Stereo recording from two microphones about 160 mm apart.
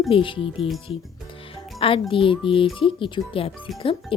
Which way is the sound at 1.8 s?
35° left (ahead or behind).